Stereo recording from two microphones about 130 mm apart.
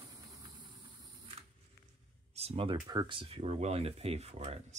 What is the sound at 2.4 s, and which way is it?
Speech, 50° right (ahead or behind).